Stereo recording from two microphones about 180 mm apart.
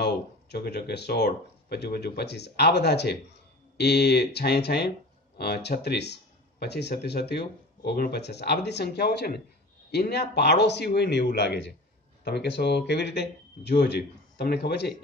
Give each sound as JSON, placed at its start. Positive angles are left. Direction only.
{"t": 0.0, "sound": "speech", "side_deg": 65}